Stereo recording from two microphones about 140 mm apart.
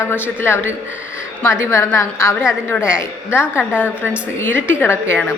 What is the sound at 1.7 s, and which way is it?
A woman's voice, 20° left (ahead or behind).